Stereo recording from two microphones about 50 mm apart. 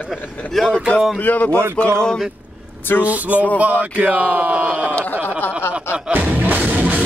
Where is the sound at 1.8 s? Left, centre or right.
Centre.